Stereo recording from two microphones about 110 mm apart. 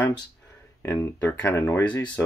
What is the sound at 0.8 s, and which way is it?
Speech, 20° left (ahead or behind).